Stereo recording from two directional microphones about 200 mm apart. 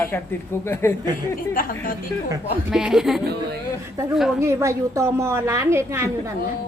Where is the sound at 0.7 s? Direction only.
10° left (ahead or behind).